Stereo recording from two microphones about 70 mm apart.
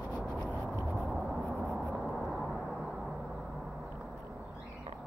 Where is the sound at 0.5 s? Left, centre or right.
Right.